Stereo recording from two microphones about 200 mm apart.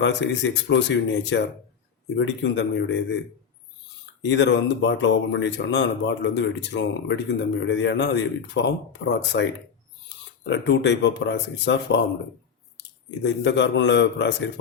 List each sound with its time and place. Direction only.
0.0 s speech: 60° left (ahead or behind)
4.3 s speech: 60° left (ahead or behind)
10.5 s speech: 60° left (ahead or behind)
13.2 s speech: 60° left (ahead or behind)